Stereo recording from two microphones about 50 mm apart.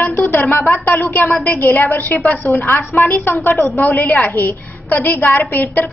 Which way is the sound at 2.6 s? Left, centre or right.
Left.